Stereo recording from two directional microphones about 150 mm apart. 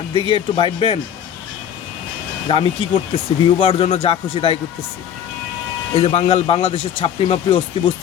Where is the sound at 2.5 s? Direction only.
35° left (ahead or behind).